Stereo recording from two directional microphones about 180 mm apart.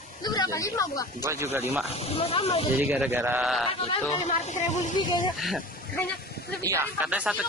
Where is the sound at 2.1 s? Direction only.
30° left (ahead or behind).